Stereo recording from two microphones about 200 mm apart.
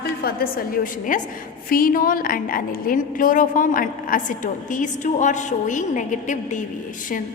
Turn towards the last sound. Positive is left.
turn(degrees=40)  # may be behind; listen again after turning